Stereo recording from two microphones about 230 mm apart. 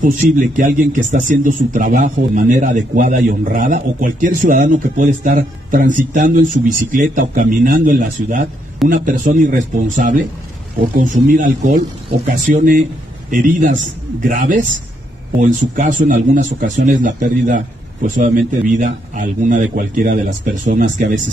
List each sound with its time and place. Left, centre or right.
0.0 s a man's voice: right
15.7 s a man's voice: right